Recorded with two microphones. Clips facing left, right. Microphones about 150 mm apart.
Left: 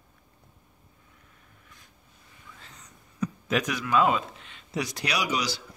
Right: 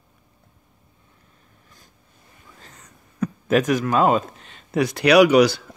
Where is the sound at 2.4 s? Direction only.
45° right (ahead or behind).